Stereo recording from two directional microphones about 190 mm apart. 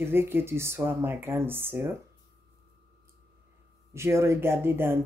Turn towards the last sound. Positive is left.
turn(degrees=-10)  # may be behind; listen again after turning